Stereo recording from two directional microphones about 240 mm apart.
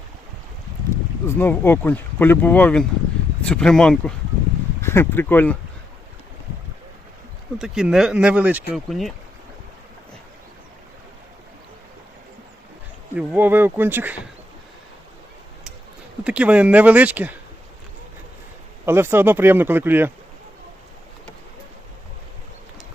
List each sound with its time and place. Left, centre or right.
1.3 s speech: centre
7.6 s speech: centre
13.1 s speech: centre
16.2 s speech: centre
18.9 s speech: centre